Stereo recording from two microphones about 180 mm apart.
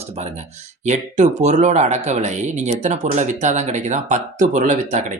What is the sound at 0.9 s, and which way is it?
Speech, 40° right (ahead or behind).